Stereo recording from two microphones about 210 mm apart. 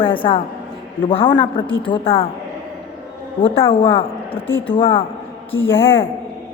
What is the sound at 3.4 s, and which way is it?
A woman's voice, 25° left (ahead or behind).